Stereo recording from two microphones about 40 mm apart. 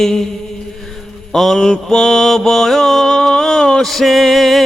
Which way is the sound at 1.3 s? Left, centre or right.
Centre.